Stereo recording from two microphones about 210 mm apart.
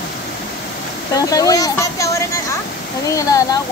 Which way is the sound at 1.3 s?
15° left (ahead or behind).